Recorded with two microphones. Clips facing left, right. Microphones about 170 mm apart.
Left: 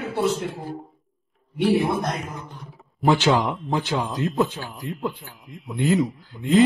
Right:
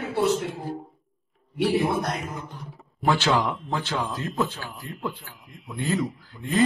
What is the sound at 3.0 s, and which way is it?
A man's voice, 20° left (ahead or behind).